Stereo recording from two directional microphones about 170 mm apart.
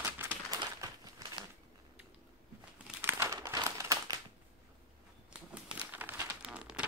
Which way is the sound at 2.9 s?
15° right (ahead or behind).